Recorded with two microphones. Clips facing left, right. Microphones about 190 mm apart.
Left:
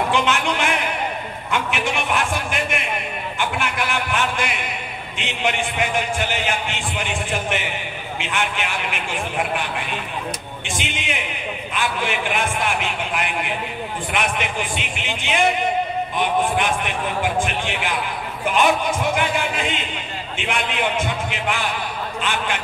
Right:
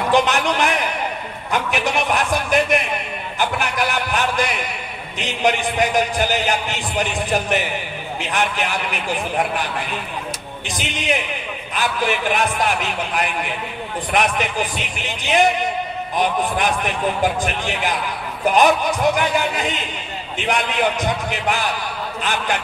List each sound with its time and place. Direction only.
0.1 s a man's voice: 40° right (ahead or behind)
10.8 s a man's voice: 40° right (ahead or behind)